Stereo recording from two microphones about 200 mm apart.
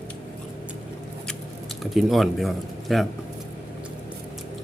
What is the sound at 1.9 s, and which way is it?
A man's voice, centre (ahead or behind).